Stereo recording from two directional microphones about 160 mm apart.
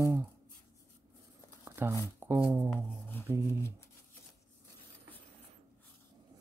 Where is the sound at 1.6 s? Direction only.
15° right (ahead or behind).